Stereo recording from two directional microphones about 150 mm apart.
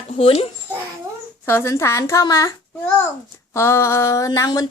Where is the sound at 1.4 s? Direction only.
15° left (ahead or behind).